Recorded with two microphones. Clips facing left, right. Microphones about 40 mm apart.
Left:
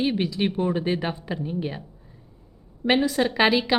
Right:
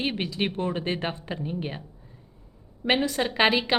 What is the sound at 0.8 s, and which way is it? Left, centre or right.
A woman's voice, right.